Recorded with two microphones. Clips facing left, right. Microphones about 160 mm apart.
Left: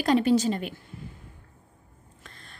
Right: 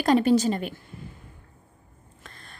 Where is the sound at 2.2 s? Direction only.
50° right (ahead or behind).